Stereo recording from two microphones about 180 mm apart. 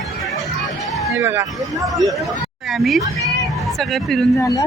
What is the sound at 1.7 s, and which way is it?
Speech, centre (ahead or behind).